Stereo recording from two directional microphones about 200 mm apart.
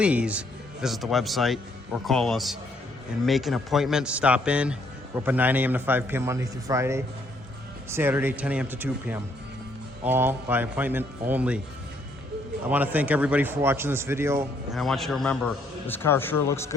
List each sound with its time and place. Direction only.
0.0 s a man's voice: 5° right (ahead or behind)
12.7 s a man's voice: 10° right (ahead or behind)
14.7 s speech: centre (ahead or behind)